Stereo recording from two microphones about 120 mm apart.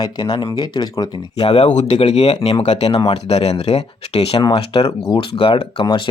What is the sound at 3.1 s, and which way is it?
Speech, 60° left (ahead or behind).